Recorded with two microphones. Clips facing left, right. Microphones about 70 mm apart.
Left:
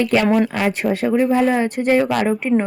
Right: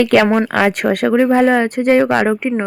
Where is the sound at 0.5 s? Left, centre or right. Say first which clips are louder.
Right 5 dB; right.